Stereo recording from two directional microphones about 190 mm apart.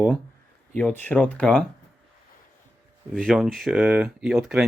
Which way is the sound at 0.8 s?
5° left (ahead or behind).